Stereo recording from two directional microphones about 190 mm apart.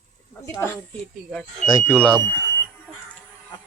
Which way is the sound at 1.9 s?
5° left (ahead or behind).